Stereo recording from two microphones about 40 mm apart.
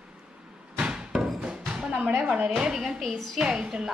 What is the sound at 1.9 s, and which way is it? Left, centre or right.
Speech, right.